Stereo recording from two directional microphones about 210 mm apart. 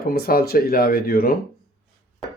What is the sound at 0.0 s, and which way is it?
Speech, 45° left (ahead or behind).